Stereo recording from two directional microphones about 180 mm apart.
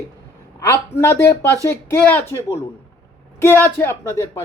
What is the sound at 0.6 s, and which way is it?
Speech, 15° left (ahead or behind).